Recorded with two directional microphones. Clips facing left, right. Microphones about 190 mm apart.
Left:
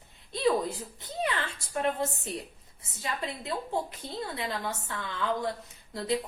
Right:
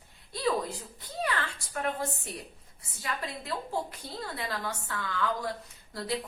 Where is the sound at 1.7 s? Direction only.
25° left (ahead or behind).